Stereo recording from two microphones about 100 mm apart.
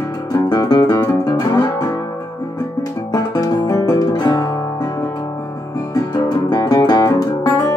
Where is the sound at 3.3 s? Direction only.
45° left (ahead or behind).